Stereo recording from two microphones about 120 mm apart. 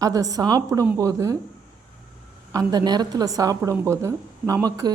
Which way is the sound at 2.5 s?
30° right (ahead or behind).